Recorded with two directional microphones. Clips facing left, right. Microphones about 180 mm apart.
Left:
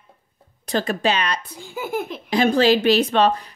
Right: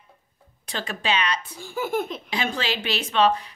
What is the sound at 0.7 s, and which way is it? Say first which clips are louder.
Speech: left 7 dB; 45° left (ahead or behind).